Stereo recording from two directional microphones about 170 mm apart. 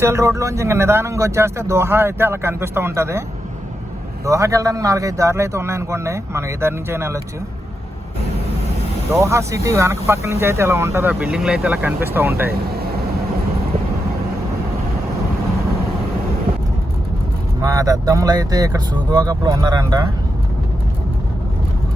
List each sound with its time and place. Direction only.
0.0 s speech: 15° right (ahead or behind)
4.3 s speech: 20° right (ahead or behind)
9.1 s speech: 15° right (ahead or behind)
12.5 s speech: 65° right (ahead or behind)
17.6 s speech: 20° right (ahead or behind)